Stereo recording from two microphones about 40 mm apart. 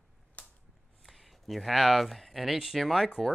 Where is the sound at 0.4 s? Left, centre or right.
Left.